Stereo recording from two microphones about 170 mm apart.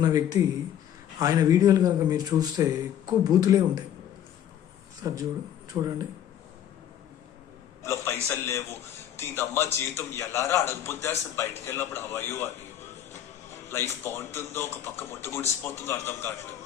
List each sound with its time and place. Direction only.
0.0 s a man's voice: 20° right (ahead or behind)
5.0 s a man's voice: 20° right (ahead or behind)
7.9 s a man's voice: 15° left (ahead or behind)
13.7 s a man's voice: 15° left (ahead or behind)